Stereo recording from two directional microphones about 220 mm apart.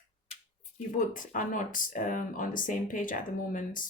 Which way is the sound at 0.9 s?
35° left (ahead or behind).